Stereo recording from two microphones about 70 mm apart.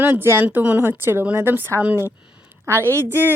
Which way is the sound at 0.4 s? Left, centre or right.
Right.